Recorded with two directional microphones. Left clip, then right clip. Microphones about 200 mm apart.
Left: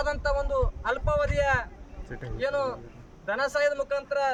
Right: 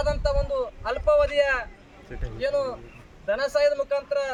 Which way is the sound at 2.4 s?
5° left (ahead or behind).